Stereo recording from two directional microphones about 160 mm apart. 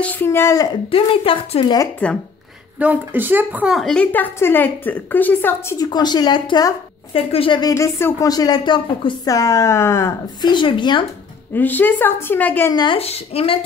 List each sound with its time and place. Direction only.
0.0 s a woman's voice: 10° left (ahead or behind)
0.8 s a woman's voice: 35° left (ahead or behind)
2.8 s a woman's voice: 10° right (ahead or behind); by 7.7 s 30° left (ahead or behind)
7.7 s speech: 20° left (ahead or behind)
11.5 s a woman's voice: 10° left (ahead or behind)
12.7 s a woman's voice: 30° left (ahead or behind)